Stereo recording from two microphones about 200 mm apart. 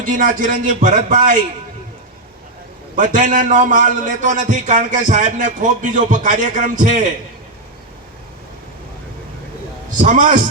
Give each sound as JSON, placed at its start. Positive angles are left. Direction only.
{"t": 0.0, "sound": "a man's voice", "side_deg": -40}
{"t": 2.9, "sound": "a man's voice", "side_deg": -40}
{"t": 10.0, "sound": "a man's voice", "side_deg": -40}